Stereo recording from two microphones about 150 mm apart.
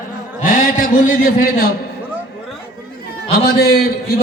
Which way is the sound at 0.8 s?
70° left (ahead or behind).